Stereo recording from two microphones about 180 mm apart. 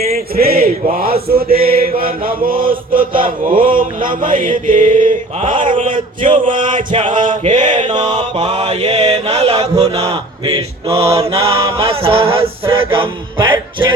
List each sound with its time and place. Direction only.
0.0 s male singing: 55° right (ahead or behind)
5.7 s a sound: 30° right (ahead or behind)
6.6 s male singing: 45° right (ahead or behind)
6.9 s a sound: 30° right (ahead or behind)
7.3 s male singing: 40° right (ahead or behind)
7.9 s music: 25° right (ahead or behind)
8.4 s mantra: 35° right (ahead or behind)